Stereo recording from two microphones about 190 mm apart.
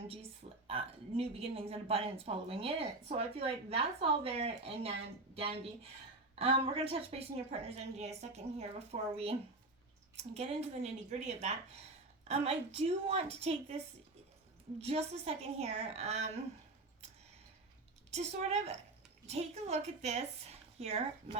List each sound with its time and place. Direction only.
0.7 s a woman's voice: 30° right (ahead or behind)
14.8 s a woman's voice: 35° right (ahead or behind)
18.1 s a woman's voice: 35° right (ahead or behind)